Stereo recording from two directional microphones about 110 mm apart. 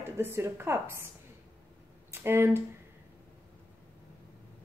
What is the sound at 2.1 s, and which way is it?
Speech, 20° right (ahead or behind).